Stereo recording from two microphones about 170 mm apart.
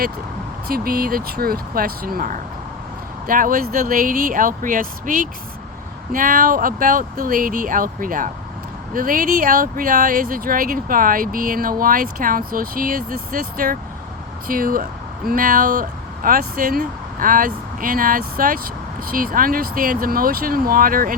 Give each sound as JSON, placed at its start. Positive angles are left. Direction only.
{"t": 0.7, "sound": "speech", "side_deg": -60}